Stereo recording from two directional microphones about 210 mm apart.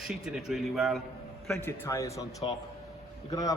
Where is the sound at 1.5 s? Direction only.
10° left (ahead or behind).